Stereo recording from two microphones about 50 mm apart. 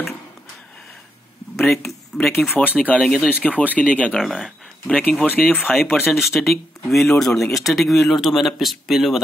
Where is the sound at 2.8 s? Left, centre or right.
Left.